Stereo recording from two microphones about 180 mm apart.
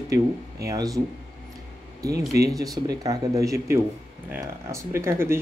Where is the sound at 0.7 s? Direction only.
20° right (ahead or behind).